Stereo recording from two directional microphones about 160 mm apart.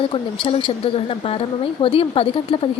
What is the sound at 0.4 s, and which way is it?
A woman's voice, 35° left (ahead or behind).